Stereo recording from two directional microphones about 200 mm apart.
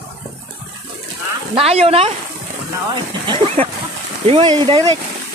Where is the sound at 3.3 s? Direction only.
30° right (ahead or behind).